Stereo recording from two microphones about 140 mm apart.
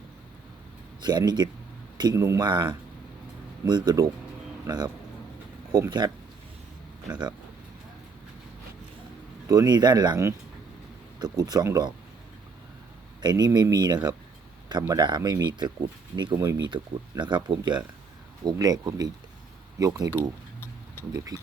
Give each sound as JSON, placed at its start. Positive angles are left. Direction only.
{"t": 1.0, "sound": "speech", "side_deg": -30}
{"t": 2.4, "sound": "speech", "side_deg": -30}
{"t": 7.1, "sound": "speech", "side_deg": -30}
{"t": 9.5, "sound": "speech", "side_deg": -30}
{"t": 13.2, "sound": "speech", "side_deg": -30}